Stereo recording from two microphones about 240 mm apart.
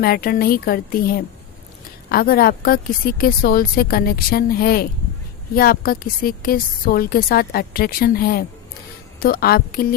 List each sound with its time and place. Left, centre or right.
0.0 s a woman's voice: left